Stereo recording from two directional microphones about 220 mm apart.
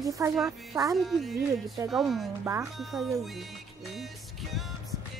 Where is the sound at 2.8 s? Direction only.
Centre (ahead or behind).